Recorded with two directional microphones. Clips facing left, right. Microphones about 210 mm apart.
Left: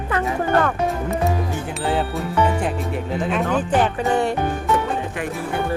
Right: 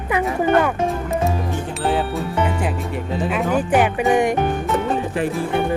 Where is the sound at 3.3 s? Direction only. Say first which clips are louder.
Right 2 dB; 5° right (ahead or behind).